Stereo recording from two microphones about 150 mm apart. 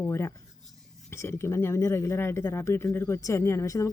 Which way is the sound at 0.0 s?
20° left (ahead or behind).